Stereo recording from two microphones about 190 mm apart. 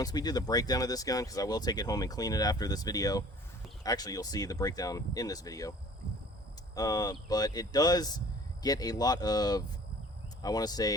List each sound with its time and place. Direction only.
0.0 s speech: 20° left (ahead or behind)
6.7 s speech: 20° left (ahead or behind)